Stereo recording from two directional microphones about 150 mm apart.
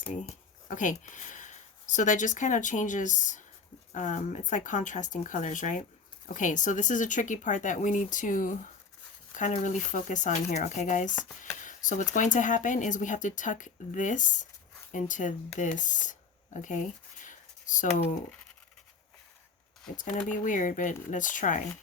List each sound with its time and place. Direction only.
0.7 s speech: 60° left (ahead or behind)
20.0 s speech: 60° left (ahead or behind)